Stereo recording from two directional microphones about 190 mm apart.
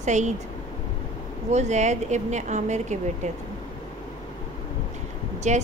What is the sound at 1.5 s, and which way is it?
A woman's voice, 35° right (ahead or behind).